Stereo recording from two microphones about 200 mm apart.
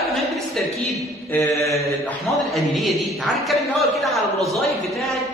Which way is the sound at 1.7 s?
5° left (ahead or behind).